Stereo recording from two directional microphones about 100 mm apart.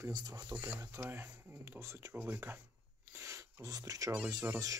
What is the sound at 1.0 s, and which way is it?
Speech, 20° right (ahead or behind).